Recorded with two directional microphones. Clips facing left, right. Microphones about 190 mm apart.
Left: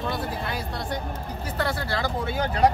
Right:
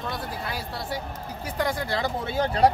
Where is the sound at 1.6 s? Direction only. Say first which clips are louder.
Right 1 dB; 15° right (ahead or behind).